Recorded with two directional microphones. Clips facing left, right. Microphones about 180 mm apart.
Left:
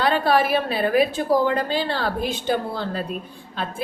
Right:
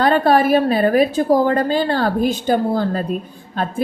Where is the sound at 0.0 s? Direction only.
45° right (ahead or behind).